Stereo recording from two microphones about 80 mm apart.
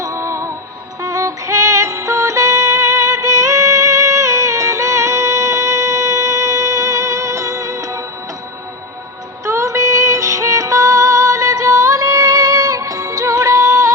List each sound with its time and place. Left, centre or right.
0.0 s music: right
9.5 s music: right